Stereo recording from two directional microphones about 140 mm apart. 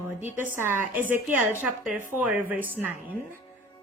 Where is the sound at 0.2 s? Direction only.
15° right (ahead or behind).